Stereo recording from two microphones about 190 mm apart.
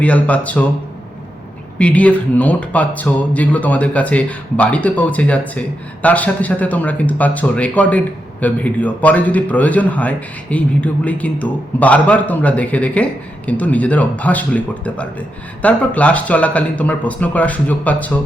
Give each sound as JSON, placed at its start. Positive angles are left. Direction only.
{"t": 0.0, "sound": "speech", "side_deg": 5}
{"t": 1.8, "sound": "speech", "side_deg": 5}